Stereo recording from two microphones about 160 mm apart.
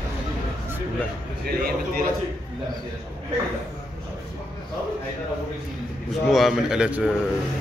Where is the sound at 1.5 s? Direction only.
75° right (ahead or behind).